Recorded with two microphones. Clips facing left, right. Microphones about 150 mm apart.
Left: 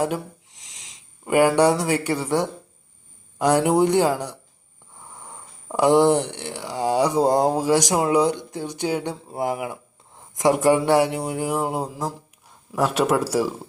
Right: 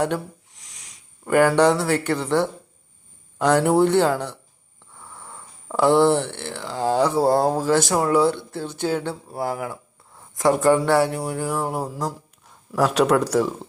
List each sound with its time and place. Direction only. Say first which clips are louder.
1.2 s speech: even; 10° left (ahead or behind)
11.3 s music: left 1 dB; 20° left (ahead or behind)
12.7 s speech: right 2 dB; centre (ahead or behind)